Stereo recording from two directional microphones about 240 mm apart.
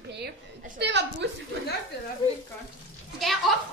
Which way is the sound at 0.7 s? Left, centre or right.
Right.